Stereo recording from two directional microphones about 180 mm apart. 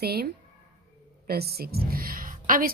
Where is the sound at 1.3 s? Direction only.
60° right (ahead or behind).